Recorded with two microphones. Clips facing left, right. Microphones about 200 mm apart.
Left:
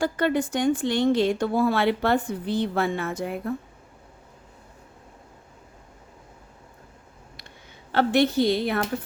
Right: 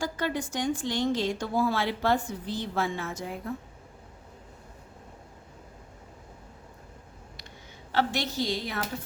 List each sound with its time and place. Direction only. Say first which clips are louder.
0.0 s speech: left 7 dB; 60° left (ahead or behind)
7.9 s speech: left 8 dB; 55° left (ahead or behind)